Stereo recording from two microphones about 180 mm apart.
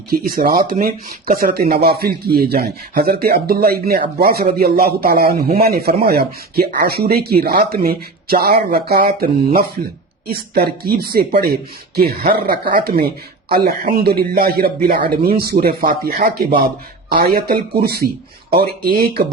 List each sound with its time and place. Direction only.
0.1 s speech: 55° right (ahead or behind)